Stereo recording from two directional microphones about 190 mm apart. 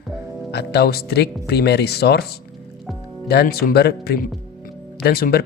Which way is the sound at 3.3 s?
55° left (ahead or behind).